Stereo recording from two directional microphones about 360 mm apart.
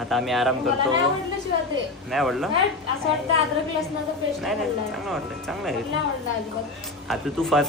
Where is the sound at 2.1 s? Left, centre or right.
Centre.